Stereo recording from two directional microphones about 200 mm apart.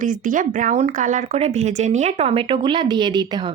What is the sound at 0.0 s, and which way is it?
Speech, 40° right (ahead or behind).